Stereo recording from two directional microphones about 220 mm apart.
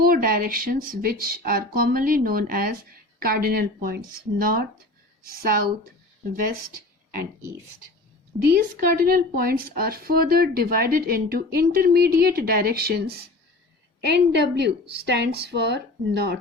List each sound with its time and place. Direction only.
0.0 s speech: 40° right (ahead or behind)
8.5 s speech: 40° right (ahead or behind)